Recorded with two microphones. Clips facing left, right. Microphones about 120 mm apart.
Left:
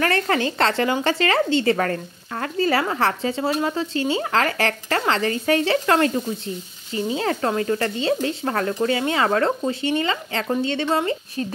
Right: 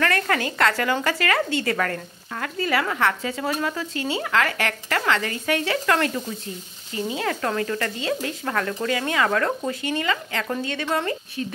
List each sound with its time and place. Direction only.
0.0 s speech: 30° left (ahead or behind)